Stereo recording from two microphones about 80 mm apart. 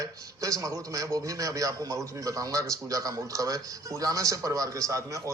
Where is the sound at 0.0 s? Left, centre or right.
Right.